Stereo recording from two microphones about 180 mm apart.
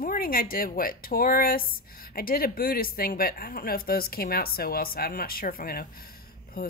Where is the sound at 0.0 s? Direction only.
55° left (ahead or behind).